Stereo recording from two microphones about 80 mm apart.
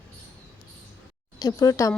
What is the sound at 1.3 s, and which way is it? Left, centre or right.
Speech, left.